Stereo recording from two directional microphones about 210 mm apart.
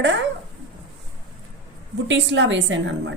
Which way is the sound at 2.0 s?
60° right (ahead or behind).